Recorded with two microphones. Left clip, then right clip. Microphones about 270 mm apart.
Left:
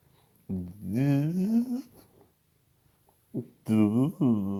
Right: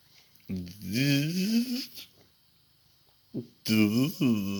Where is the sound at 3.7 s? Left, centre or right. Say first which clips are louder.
Even; centre.